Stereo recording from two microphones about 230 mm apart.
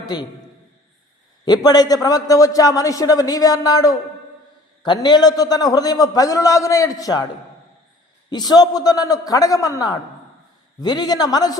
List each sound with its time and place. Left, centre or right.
0.0 s a man's voice: centre
1.6 s a man's voice: centre
8.3 s a man's voice: centre